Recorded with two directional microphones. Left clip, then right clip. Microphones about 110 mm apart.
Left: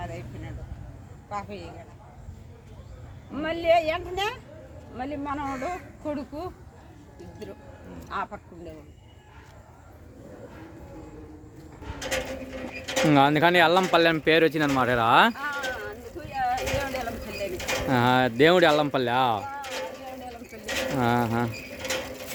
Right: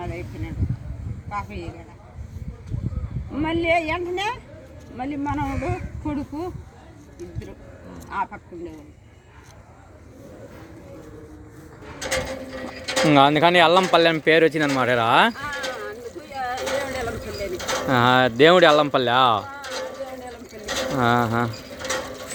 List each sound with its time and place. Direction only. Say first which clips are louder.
0.0 s a sound: right 5 dB; 35° left (ahead or behind)
1.4 s speech: right 5 dB; 40° left (ahead or behind)
3.3 s speech: right 1 dB; 40° left (ahead or behind)
8.1 s speech: right 5 dB; 40° left (ahead or behind)
12.0 s speech: right 4 dB; 55° right (ahead or behind)
13.1 s speech: right 4 dB; 10° left (ahead or behind)
15.4 s a sound: right 2 dB; 50° right (ahead or behind)
15.9 s a sound: right 3 dB; 5° right (ahead or behind)
17.6 s bird: right 3 dB; 45° right (ahead or behind)
17.8 s speech: right 5 dB; 5° left (ahead or behind)
19.6 s a sound: right 3 dB; 45° right (ahead or behind)
20.7 s bird: right 3 dB; 45° right (ahead or behind)
20.9 s speech: right 6 dB; 5° left (ahead or behind)
21.5 s mechanisms: right 3 dB; 40° right (ahead or behind)